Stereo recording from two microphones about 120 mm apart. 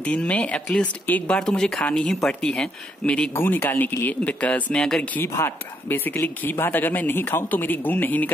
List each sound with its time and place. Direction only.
0.0 s speech: 10° left (ahead or behind)